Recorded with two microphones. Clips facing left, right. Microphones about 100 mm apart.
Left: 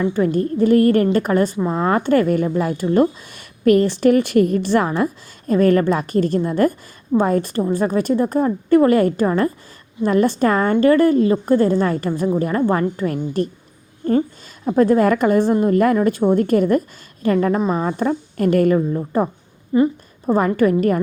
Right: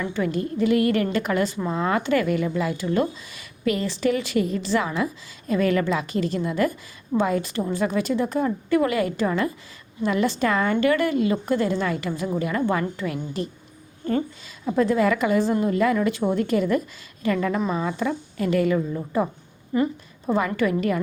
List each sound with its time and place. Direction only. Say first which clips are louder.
0.0 s a woman's voice: left 7 dB; 40° left (ahead or behind)
14.0 s a woman's voice: left 7 dB; 35° left (ahead or behind)
19.7 s speech: left 7 dB; 25° left (ahead or behind)
20.6 s a woman's voice: left 6 dB; 45° left (ahead or behind)